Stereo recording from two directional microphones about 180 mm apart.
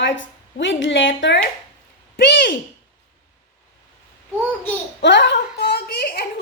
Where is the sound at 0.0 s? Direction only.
90° left.